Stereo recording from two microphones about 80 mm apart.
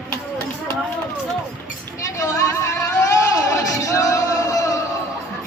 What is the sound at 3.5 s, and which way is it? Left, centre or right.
Music, left.